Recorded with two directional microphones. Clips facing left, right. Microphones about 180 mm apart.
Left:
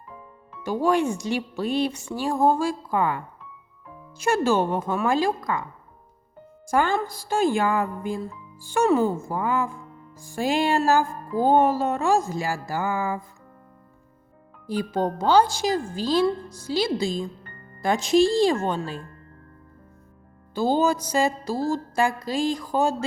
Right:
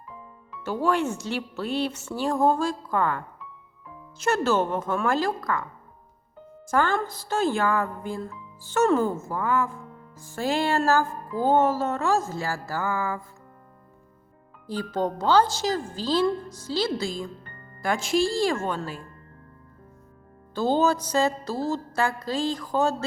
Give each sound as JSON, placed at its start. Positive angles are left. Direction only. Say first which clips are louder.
{"t": 0.6, "sound": "music", "louder": "left 3 dB", "side_deg": 15}
{"t": 6.7, "sound": "music", "louder": "left 1 dB", "side_deg": 15}
{"t": 14.7, "sound": "music", "louder": "left 2 dB", "side_deg": 10}
{"t": 17.8, "sound": "a woman's voice", "louder": "left 5 dB", "side_deg": 20}
{"t": 20.6, "sound": "music", "louder": "left 1 dB", "side_deg": 10}